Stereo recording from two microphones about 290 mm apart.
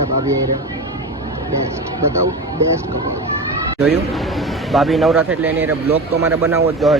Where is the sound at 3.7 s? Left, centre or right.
Centre.